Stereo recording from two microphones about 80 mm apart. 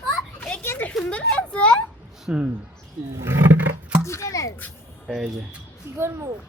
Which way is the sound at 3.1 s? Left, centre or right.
Right.